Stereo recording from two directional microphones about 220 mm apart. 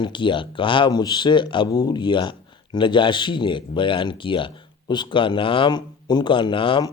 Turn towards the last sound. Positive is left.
turn(degrees=20)  # may be behind; listen again after turning